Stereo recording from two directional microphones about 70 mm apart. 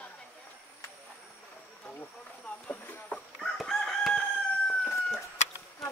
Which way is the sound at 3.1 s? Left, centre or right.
Centre.